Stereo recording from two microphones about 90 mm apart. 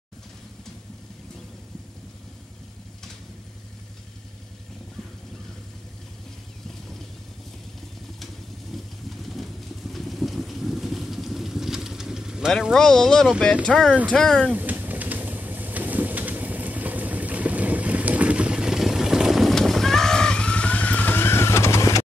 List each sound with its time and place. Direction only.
8.7 s vehicle: centre (ahead or behind)
12.7 s speech: 5° left (ahead or behind)
14.5 s vehicle: 20° right (ahead or behind); by 22.0 s 30° left (ahead or behind)